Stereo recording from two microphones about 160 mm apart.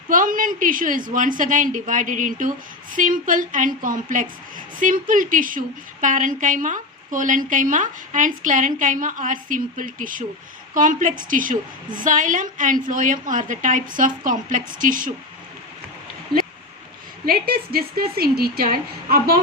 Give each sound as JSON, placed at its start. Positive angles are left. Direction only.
{"t": 0.1, "sound": "a woman's voice", "side_deg": -60}
{"t": 16.3, "sound": "a sound", "side_deg": -30}
{"t": 17.2, "sound": "a woman's voice", "side_deg": -65}